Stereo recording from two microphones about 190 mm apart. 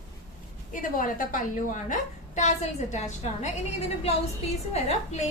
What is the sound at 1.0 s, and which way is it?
A woman's voice, 45° left (ahead or behind).